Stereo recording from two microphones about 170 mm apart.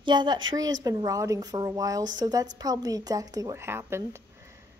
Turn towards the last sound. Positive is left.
turn(degrees=-15)  # may be behind; listen again after turning